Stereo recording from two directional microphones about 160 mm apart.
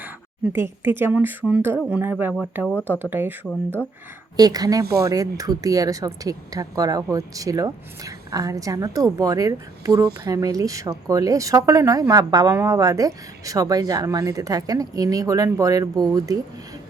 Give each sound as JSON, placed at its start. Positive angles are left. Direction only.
{"t": 0.5, "sound": "speech", "side_deg": -15}
{"t": 2.7, "sound": "speech", "side_deg": 10}
{"t": 3.0, "sound": "speech", "side_deg": -10}
{"t": 4.4, "sound": "speech", "side_deg": -25}